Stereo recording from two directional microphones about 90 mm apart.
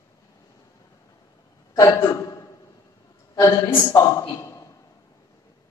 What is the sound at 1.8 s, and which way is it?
A man's voice, 35° left (ahead or behind).